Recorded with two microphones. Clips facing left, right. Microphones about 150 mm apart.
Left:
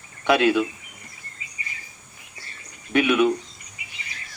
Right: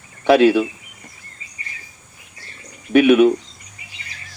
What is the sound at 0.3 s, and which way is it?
Speech, 30° right (ahead or behind).